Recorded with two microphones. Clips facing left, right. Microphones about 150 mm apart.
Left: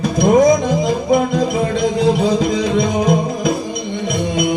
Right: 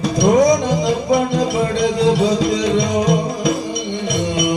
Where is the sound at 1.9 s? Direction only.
50° left (ahead or behind).